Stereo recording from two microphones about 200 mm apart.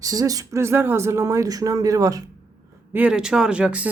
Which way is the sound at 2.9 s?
5° right (ahead or behind).